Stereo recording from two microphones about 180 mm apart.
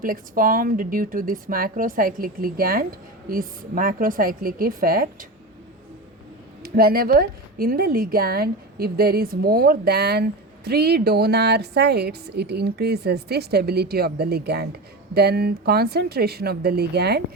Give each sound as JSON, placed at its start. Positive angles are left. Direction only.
{"t": 0.0, "sound": "speech", "side_deg": -50}
{"t": 6.6, "sound": "a woman's voice", "side_deg": -55}